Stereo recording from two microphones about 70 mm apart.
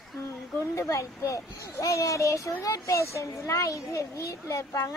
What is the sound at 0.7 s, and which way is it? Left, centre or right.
A child's voice, left.